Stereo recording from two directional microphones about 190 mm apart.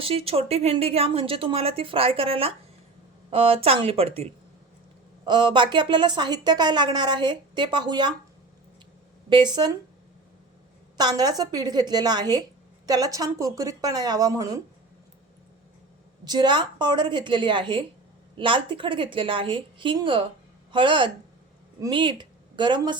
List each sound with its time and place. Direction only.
0.0 s a woman's voice: 30° right (ahead or behind)
9.3 s a woman's voice: 25° right (ahead or behind)
10.9 s a woman's voice: 20° right (ahead or behind)
16.2 s a woman's voice: 20° right (ahead or behind)